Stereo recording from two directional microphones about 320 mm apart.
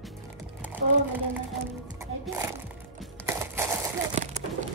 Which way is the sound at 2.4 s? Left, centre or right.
Centre.